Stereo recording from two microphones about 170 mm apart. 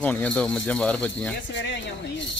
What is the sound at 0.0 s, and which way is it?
Speech, 10° left (ahead or behind).